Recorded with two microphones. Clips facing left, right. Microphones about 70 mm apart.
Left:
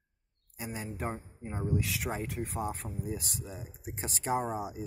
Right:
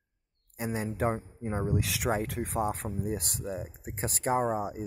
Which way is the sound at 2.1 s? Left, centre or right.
Right.